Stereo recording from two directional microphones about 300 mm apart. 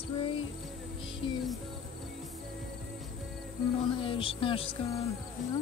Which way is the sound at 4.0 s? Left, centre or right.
Centre.